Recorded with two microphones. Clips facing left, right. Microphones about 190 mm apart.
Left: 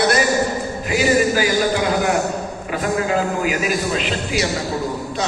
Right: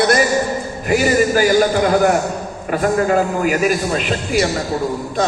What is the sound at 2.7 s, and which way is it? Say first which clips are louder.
A man's voice: right 5 dB; 50° right (ahead or behind).